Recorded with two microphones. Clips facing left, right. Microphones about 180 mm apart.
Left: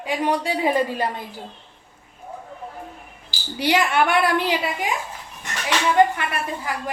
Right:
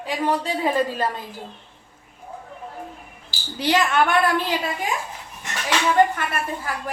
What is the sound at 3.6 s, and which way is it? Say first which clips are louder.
Speech: even; 10° left (ahead or behind).